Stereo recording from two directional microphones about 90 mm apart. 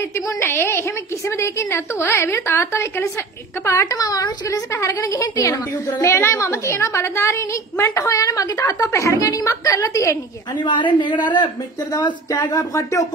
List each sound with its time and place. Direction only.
0.4 s a woman's voice: 25° left (ahead or behind)
10.6 s speech: 60° left (ahead or behind)
12.5 s a woman's voice: 40° left (ahead or behind)